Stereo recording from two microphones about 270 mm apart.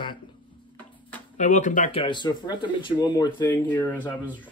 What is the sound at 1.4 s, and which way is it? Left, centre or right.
Speech, left.